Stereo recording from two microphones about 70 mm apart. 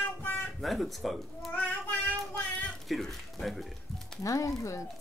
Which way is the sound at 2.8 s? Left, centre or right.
Centre.